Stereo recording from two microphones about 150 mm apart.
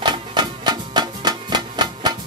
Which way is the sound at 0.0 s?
30° right (ahead or behind).